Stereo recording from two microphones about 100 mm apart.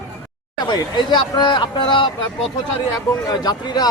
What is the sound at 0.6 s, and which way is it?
A man's voice, 50° left (ahead or behind).